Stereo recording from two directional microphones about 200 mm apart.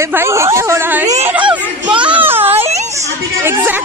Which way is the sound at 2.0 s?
5° right (ahead or behind).